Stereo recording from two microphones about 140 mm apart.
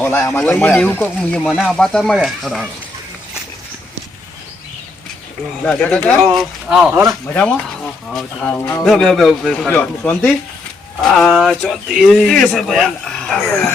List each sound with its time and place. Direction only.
0.0 s a man's voice: 15° left (ahead or behind); by 2.6 s centre (ahead or behind)
5.6 s speech: 5° left (ahead or behind)
6.3 s speech: 5° right (ahead or behind)
7.3 s speech: 10° left (ahead or behind)
8.8 s speech: 5° left (ahead or behind)